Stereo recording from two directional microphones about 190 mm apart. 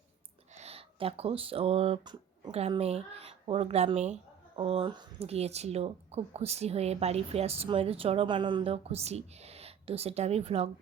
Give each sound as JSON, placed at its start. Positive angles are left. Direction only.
{"t": 0.5, "sound": "speech", "side_deg": -35}